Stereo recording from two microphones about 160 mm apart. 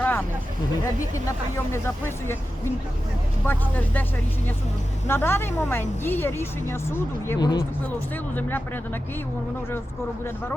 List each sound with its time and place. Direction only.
0.0 s vehicle: 10° left (ahead or behind)
1.1 s speech: 15° left (ahead or behind)
3.4 s speech: 10° left (ahead or behind)
5.0 s speech: 15° left (ahead or behind)
7.3 s speech: 25° left (ahead or behind)
8.4 s speech: 10° left (ahead or behind)